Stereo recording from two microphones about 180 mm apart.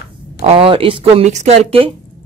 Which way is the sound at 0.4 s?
35° right (ahead or behind).